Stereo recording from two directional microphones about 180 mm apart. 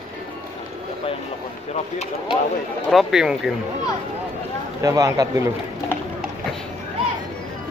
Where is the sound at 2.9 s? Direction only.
Centre (ahead or behind).